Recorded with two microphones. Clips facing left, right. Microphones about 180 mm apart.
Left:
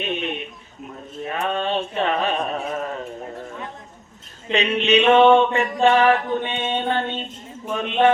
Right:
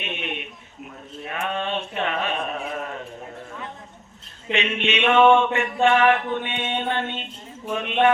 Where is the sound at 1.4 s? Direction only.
35° left (ahead or behind).